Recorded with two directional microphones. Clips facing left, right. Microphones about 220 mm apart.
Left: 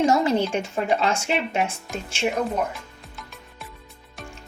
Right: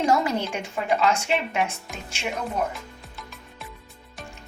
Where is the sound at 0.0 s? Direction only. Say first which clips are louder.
Left 3 dB; 25° left (ahead or behind).